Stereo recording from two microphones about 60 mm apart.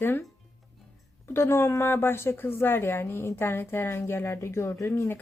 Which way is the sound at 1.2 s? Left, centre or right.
Left.